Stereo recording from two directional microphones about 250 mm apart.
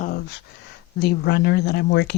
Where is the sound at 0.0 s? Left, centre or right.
Left.